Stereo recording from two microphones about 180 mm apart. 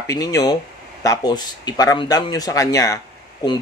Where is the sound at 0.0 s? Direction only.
20° left (ahead or behind).